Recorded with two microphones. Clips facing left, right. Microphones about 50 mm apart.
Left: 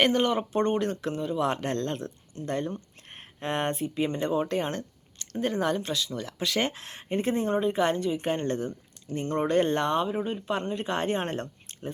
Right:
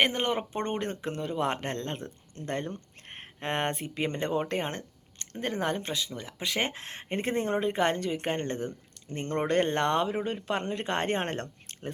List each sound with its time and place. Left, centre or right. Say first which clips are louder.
0.0 s speech: left 3 dB; right
1.1 s speech: left 2 dB; right
1.7 s speech: left 5 dB; right
2.3 s speech: left 3 dB; right
8.4 s speech: left 4 dB; right
9.2 s speech: left 2 dB; right